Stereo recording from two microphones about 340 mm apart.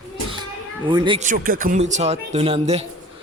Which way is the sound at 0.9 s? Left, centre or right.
Centre.